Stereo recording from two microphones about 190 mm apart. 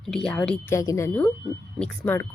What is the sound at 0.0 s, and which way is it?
Speech, 5° left (ahead or behind).